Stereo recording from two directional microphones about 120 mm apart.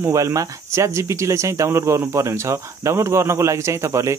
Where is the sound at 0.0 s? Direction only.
25° right (ahead or behind).